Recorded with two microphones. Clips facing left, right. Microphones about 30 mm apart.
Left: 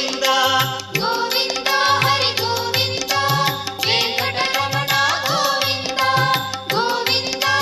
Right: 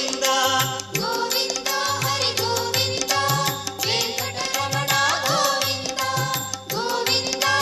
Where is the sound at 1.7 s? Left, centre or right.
Left.